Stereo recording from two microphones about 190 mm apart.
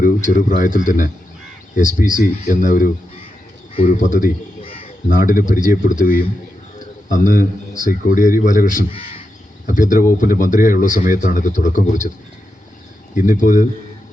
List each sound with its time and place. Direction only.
0.0 s speech: 40° left (ahead or behind)
4.6 s crow: 30° left (ahead or behind)
5.0 s speech: 45° left (ahead or behind)
6.7 s bird: 40° left (ahead or behind)
7.8 s speech: 45° left (ahead or behind)
8.9 s speech: 30° left (ahead or behind)
9.6 s speech: 45° left (ahead or behind)
13.1 s speech: 45° left (ahead or behind)